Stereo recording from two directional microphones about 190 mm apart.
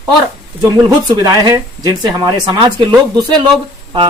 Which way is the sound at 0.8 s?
20° right (ahead or behind).